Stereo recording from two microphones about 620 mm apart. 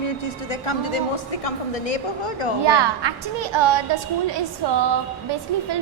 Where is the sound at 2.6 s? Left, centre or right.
Right.